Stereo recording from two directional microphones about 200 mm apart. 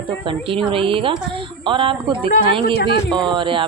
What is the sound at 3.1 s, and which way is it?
Speech, 20° right (ahead or behind).